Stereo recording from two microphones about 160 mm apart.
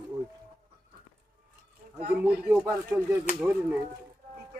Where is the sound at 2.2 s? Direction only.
5° right (ahead or behind).